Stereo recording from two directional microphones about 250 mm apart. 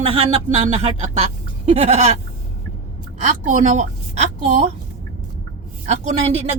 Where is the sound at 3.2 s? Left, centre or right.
Right.